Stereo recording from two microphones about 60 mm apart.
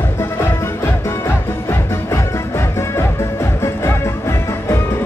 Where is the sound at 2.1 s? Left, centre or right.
Left.